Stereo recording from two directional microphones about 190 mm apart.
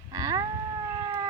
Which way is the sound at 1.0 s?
25° right (ahead or behind).